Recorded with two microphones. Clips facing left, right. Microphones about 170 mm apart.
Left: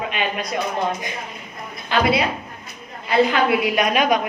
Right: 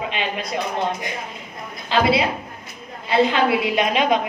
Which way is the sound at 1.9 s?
25° right (ahead or behind).